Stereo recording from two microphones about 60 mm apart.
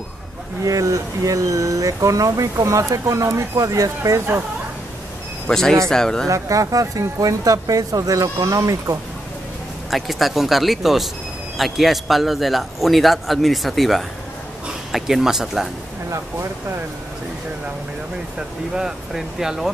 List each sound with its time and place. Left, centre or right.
0.7 s speech: right
5.5 s speech: centre
6.2 s speech: right
9.8 s a man's voice: centre
18.8 s speech: centre